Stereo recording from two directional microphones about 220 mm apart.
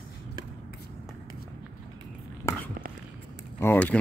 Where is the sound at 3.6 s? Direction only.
10° left (ahead or behind).